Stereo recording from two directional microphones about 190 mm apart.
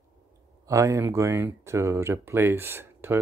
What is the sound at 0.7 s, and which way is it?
Speech, 15° right (ahead or behind).